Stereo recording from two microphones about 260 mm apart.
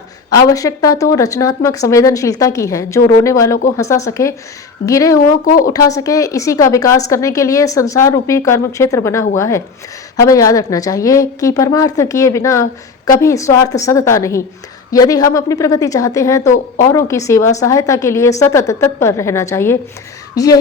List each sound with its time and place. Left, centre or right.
0.3 s a woman's voice: centre
5.5 s speech: left
5.7 s a woman's voice: centre